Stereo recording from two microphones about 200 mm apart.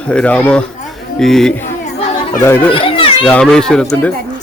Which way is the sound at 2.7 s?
25° left (ahead or behind).